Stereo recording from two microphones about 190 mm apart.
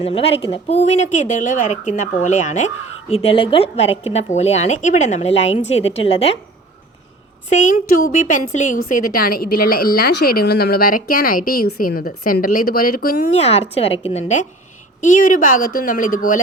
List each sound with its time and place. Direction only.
0.0 s a woman's voice: 30° left (ahead or behind)
7.5 s speech: 40° left (ahead or behind)
13.3 s a woman's voice: 35° left (ahead or behind)